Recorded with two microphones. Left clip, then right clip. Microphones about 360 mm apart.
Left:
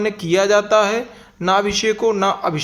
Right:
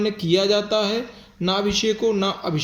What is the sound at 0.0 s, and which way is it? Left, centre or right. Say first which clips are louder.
Speech: left 3 dB; centre.